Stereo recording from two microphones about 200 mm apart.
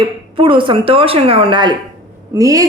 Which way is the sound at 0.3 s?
25° right (ahead or behind).